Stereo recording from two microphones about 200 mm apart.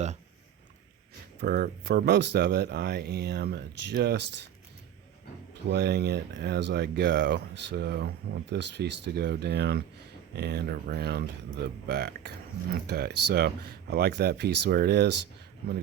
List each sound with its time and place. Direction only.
1.4 s speech: 50° right (ahead or behind)
5.6 s speech: 55° right (ahead or behind)